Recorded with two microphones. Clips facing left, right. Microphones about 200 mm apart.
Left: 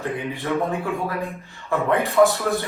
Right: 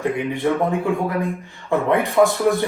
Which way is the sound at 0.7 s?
15° right (ahead or behind).